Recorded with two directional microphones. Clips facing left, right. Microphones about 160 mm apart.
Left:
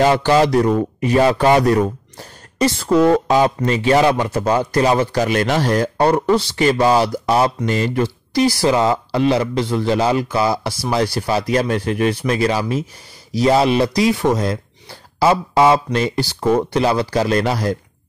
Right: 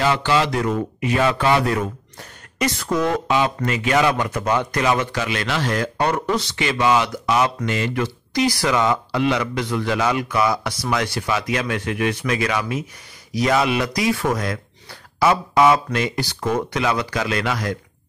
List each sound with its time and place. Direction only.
0.0 s speech: 40° left (ahead or behind)